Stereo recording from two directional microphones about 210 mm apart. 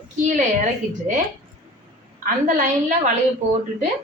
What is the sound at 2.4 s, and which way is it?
Speech, 35° right (ahead or behind).